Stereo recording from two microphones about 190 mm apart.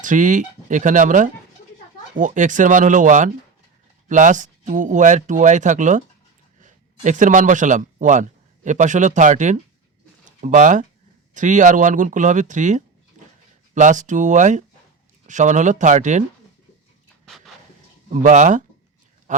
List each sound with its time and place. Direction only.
0.0 s speech: 40° right (ahead or behind)
17.2 s a sound: centre (ahead or behind)
18.1 s a man's voice: 40° right (ahead or behind)